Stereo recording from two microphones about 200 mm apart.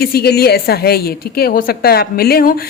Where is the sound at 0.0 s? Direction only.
50° left (ahead or behind).